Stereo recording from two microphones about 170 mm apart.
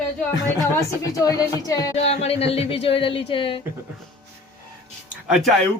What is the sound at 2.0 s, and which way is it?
Speech, 35° left (ahead or behind).